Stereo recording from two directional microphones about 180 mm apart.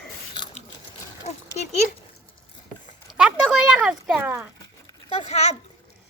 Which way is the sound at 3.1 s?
5° right (ahead or behind).